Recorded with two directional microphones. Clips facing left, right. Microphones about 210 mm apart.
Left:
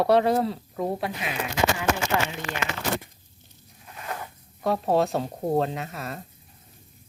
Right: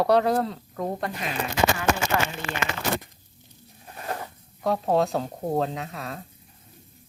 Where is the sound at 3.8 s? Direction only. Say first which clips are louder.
Right 3 dB; 40° right (ahead or behind).